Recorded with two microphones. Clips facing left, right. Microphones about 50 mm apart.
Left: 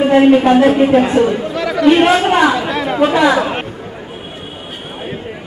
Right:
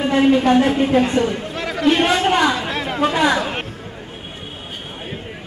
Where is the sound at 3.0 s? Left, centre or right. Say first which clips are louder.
Left 5 dB; centre.